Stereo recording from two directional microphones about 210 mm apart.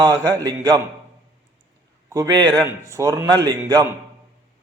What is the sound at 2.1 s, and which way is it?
A man's voice, 15° right (ahead or behind).